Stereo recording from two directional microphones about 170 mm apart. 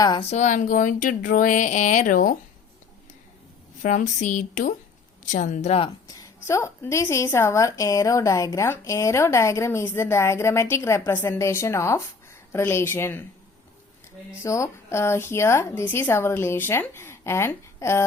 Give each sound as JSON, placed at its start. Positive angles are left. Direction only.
{"t": 0.0, "sound": "speech", "side_deg": 25}
{"t": 0.3, "sound": "speech", "side_deg": 45}
{"t": 3.8, "sound": "speech", "side_deg": 50}
{"t": 6.1, "sound": "a woman's voice", "side_deg": 15}
{"t": 14.4, "sound": "a woman's voice", "side_deg": 20}